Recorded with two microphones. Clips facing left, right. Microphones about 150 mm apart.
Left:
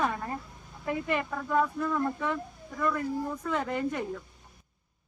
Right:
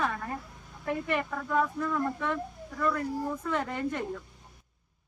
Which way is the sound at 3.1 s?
10° right (ahead or behind).